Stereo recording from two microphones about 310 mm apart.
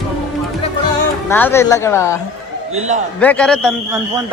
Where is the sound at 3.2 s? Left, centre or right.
Centre.